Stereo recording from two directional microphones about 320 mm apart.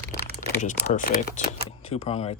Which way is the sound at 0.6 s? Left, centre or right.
Left.